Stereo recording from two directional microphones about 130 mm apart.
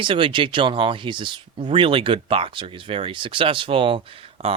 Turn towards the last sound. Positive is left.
turn(degrees=-45)  # may be behind; listen again after turning